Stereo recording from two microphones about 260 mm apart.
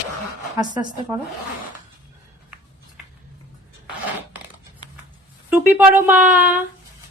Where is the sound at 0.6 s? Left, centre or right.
Centre.